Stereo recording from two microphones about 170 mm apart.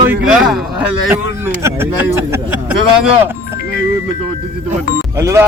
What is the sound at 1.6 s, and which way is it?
Speech, 15° right (ahead or behind).